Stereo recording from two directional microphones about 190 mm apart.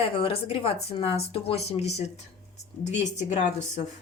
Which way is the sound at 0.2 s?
30° left (ahead or behind).